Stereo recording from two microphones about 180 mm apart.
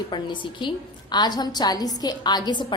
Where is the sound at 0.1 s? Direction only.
25° left (ahead or behind).